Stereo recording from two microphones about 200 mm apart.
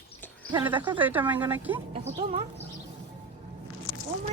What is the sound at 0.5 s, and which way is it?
Speech, 10° right (ahead or behind).